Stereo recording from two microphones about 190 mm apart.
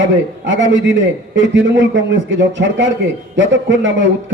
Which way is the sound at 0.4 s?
75° right (ahead or behind).